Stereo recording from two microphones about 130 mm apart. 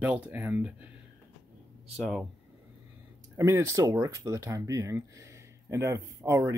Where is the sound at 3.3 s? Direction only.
20° right (ahead or behind).